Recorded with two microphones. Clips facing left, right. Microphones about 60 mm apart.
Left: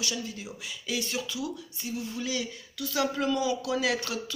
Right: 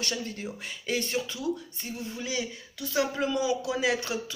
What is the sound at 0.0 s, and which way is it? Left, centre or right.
Speech, right.